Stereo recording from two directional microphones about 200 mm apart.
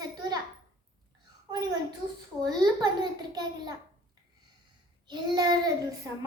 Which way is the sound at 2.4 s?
20° right (ahead or behind).